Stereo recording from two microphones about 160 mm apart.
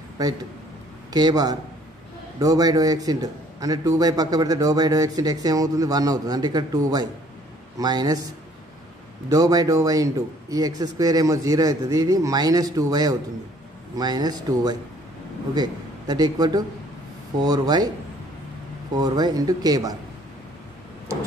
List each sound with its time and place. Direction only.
0.2 s a man's voice: 20° right (ahead or behind)
9.3 s a man's voice: 20° right (ahead or behind)
18.9 s a man's voice: 25° right (ahead or behind)